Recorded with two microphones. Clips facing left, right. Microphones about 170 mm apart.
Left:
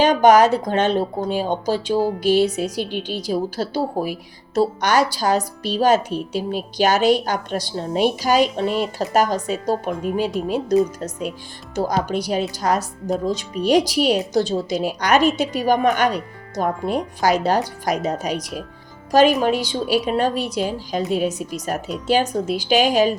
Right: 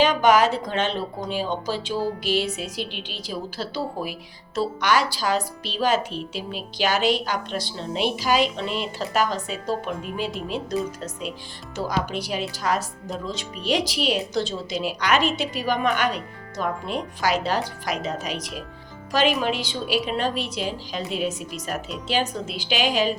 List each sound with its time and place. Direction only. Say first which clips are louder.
0.0 s a woman's voice: left 5 dB; 40° left (ahead or behind)